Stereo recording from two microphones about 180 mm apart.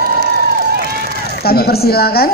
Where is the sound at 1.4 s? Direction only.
60° left (ahead or behind).